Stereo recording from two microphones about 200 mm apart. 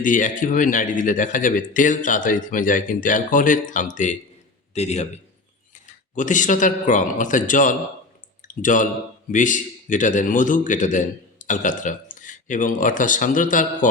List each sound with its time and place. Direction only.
0.0 s a man's voice: 40° left (ahead or behind)